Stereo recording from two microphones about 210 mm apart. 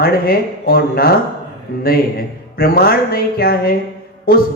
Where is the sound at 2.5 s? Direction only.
45° left (ahead or behind).